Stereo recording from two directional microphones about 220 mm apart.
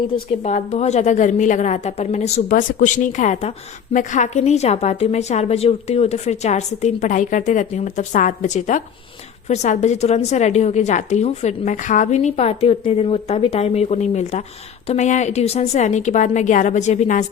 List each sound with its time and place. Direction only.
0.4 s a woman's voice: 30° left (ahead or behind)